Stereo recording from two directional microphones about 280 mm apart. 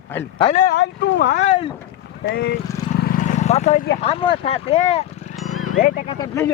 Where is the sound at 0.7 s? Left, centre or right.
Left.